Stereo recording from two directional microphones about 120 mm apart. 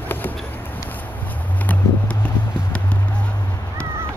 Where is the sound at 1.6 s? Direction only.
10° left (ahead or behind).